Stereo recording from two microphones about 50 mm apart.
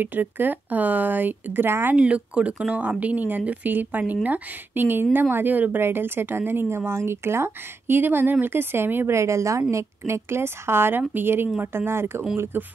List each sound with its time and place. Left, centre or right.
0.0 s speech: right
2.0 s speech: right
5.8 s speech: right
9.1 s a woman's voice: right
12.5 s speech: right